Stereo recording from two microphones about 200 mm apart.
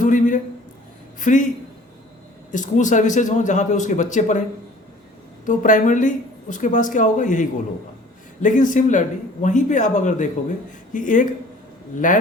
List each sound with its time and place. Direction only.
0.0 s a sound: 40° left (ahead or behind)
1.2 s a man's voice: 40° left (ahead or behind)
2.5 s speech: 40° left (ahead or behind)
5.5 s speech: 40° left (ahead or behind)